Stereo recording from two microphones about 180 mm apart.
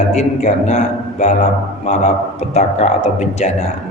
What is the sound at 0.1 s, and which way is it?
Speech, 40° left (ahead or behind).